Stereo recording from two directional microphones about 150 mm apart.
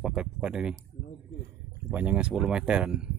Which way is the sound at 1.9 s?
10° right (ahead or behind).